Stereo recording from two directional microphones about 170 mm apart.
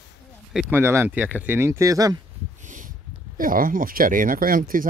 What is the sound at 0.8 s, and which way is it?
Speech, 15° right (ahead or behind).